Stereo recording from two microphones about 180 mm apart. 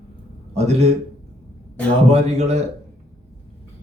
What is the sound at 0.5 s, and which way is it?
Speech, 35° right (ahead or behind).